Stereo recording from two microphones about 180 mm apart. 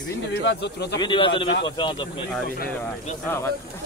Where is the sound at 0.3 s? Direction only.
75° left (ahead or behind).